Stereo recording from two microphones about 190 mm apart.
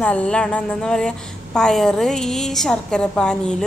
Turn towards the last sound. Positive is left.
turn(degrees=5)  # may be behind; listen again after turning